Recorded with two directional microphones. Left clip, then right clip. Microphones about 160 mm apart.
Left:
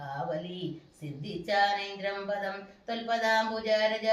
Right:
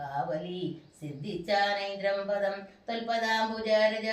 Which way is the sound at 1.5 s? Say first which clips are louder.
Left 1 dB; 15° left (ahead or behind).